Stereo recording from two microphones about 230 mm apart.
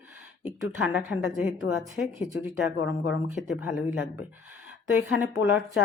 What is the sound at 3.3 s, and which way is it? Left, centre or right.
Speech, centre.